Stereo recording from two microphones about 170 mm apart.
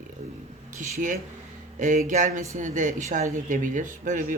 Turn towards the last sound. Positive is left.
turn(degrees=-50)  # may be behind; listen again after turning